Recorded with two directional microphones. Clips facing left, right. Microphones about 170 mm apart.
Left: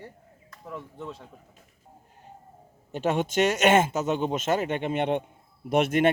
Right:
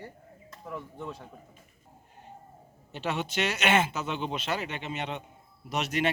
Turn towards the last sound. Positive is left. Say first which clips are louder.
# left 8 dB
turn(degrees=50)  # may be behind; listen again after turning